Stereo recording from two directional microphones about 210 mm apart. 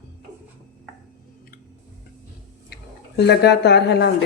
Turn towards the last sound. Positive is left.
turn(degrees=55)  # may be behind; listen again after turning